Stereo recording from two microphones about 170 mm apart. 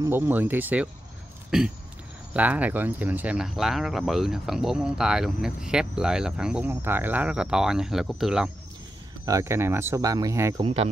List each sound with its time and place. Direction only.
0.0 s speech: 15° right (ahead or behind)
9.2 s speech: 20° right (ahead or behind)
10.6 s speech: 35° right (ahead or behind)